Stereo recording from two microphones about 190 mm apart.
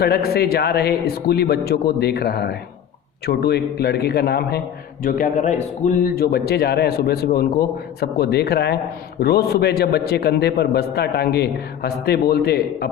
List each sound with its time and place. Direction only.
0.0 s a man's voice: 55° left (ahead or behind)
5.0 s a man's voice: 45° left (ahead or behind)